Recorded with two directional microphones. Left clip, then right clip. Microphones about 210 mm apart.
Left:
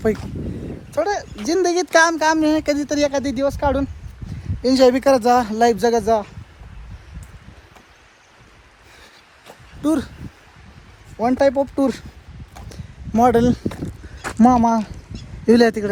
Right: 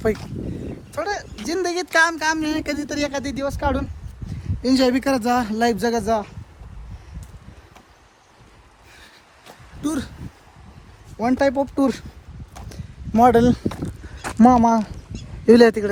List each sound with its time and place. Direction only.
0.9 s speech: 5° right (ahead or behind)
9.8 s speech: centre (ahead or behind)
11.2 s speech: 10° right (ahead or behind)
12.6 s a sound: 10° right (ahead or behind)
13.2 s speech: 25° right (ahead or behind)